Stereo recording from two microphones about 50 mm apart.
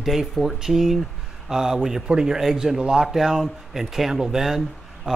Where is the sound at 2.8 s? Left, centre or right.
Centre.